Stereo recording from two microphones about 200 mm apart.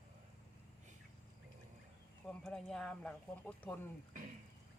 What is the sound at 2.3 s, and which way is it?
Speech, 5° left (ahead or behind).